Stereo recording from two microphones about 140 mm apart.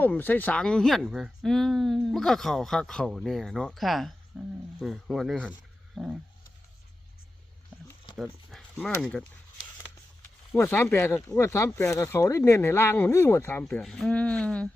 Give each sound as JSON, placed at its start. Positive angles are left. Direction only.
{"t": 0.0, "sound": "speech", "side_deg": 15}
{"t": 5.9, "sound": "wild animals", "side_deg": 0}
{"t": 8.1, "sound": "a sound", "side_deg": 0}
{"t": 8.7, "sound": "speech", "side_deg": 10}
{"t": 10.5, "sound": "speech", "side_deg": 15}
{"t": 13.7, "sound": "speech", "side_deg": 5}